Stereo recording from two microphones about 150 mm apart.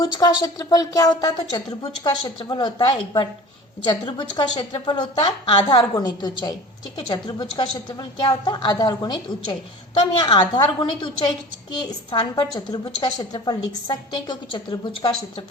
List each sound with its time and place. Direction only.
0.0 s a woman's voice: 25° left (ahead or behind)